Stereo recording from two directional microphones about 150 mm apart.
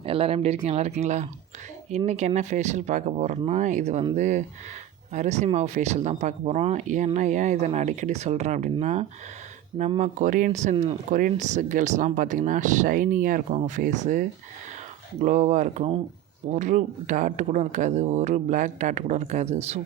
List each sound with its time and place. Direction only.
0.0 s speech: 40° right (ahead or behind)